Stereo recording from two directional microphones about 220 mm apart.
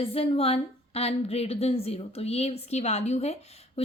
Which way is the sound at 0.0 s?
25° left (ahead or behind).